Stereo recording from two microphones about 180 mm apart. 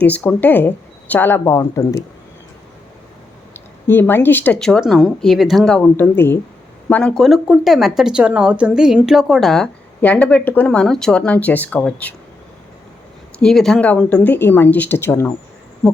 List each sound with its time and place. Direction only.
0.0 s a woman's voice: 10° left (ahead or behind)
3.5 s a woman's voice: 10° left (ahead or behind)
13.4 s a woman's voice: centre (ahead or behind)